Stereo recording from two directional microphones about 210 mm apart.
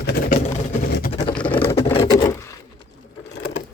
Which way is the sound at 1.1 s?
25° left (ahead or behind).